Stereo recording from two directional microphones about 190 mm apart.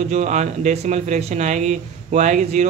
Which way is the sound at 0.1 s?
40° right (ahead or behind).